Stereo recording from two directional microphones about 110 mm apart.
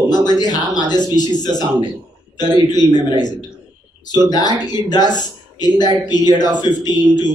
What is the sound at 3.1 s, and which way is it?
A man's voice, 40° left (ahead or behind).